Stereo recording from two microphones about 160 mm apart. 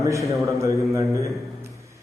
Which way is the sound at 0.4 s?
20° right (ahead or behind).